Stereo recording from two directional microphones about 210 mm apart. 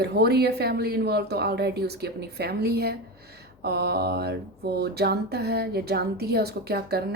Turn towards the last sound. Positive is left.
turn(degrees=-50)  # may be behind; listen again after turning